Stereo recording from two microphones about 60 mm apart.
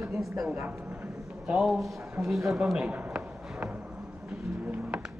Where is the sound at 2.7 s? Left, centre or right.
Centre.